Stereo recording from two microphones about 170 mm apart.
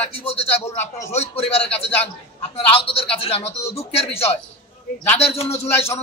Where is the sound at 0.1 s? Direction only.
35° left (ahead or behind).